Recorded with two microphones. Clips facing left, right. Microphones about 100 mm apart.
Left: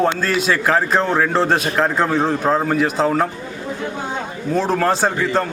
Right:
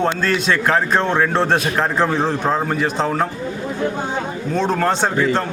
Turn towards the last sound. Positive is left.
turn(degrees=0)  # may be behind; listen again after turning